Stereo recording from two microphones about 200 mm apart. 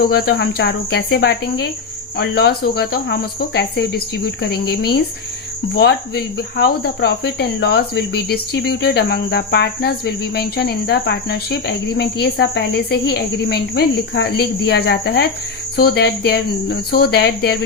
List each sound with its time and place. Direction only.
0.0 s speech: 50° left (ahead or behind)